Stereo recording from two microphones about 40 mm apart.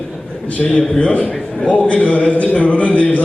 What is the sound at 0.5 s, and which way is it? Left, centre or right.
A man's voice, left.